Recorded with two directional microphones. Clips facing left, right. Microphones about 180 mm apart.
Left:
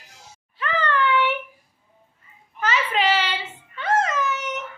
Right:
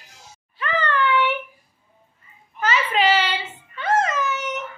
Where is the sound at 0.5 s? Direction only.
Centre (ahead or behind).